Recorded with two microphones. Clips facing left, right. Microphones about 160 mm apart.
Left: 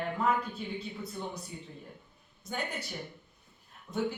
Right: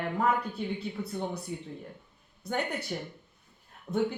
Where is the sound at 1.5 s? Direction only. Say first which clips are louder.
Right 6 dB; 65° right (ahead or behind).